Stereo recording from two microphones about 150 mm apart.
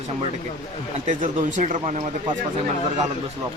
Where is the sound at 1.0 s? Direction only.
55° right (ahead or behind).